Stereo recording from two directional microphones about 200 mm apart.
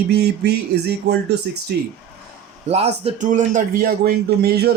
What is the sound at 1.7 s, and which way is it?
Speech, 55° right (ahead or behind).